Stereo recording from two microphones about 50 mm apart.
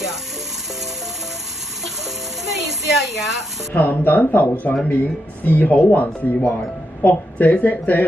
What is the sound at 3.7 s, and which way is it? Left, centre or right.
Speech, left.